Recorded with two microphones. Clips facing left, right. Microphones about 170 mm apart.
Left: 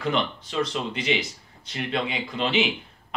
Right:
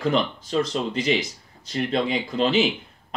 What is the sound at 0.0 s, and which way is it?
Speech, 40° right (ahead or behind).